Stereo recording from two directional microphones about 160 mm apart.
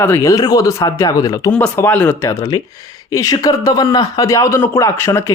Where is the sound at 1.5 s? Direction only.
10° left (ahead or behind).